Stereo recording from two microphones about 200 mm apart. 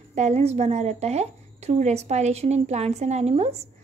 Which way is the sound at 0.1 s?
35° right (ahead or behind).